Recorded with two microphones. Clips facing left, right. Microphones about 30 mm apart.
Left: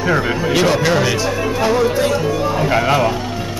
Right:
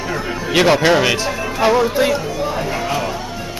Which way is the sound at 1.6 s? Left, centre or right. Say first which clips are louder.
Right 2 dB; centre.